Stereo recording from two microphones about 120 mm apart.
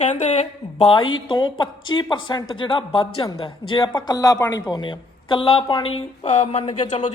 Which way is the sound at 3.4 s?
45° left (ahead or behind).